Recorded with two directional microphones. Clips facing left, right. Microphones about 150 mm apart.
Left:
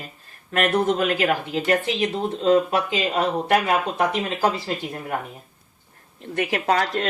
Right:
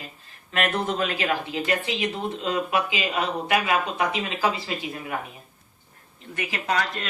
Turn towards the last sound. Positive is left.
turn(degrees=60)  # may be behind; listen again after turning